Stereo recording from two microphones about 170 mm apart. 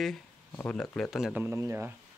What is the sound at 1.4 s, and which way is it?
Speech, 15° right (ahead or behind).